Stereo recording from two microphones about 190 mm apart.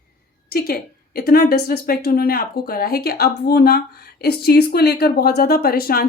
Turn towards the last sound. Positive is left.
turn(degrees=55)  # may be behind; listen again after turning